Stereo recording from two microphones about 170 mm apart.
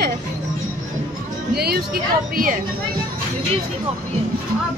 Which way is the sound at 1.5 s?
70° right (ahead or behind).